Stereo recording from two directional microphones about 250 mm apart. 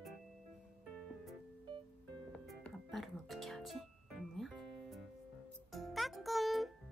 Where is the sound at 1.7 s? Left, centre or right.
Centre.